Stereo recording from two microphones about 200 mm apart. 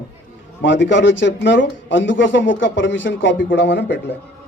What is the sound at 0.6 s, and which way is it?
A man's voice, 65° left (ahead or behind).